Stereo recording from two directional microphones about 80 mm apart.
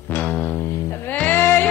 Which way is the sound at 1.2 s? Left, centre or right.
Left.